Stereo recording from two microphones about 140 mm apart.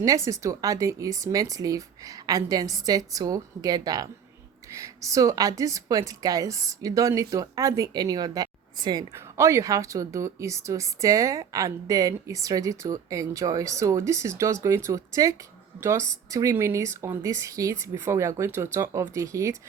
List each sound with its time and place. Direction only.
0.0 s a woman's voice: 25° right (ahead or behind)